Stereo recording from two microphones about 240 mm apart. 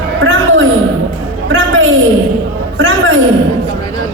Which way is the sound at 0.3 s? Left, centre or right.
Right.